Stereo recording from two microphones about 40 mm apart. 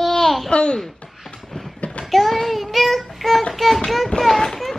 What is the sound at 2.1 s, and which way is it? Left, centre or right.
Child singing, centre.